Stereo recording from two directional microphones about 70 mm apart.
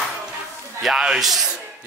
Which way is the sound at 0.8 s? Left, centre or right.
Centre.